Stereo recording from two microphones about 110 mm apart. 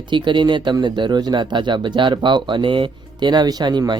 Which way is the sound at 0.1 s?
45° right (ahead or behind).